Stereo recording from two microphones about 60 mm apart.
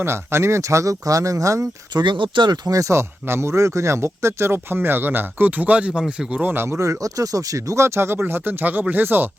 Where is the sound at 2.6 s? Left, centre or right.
Right.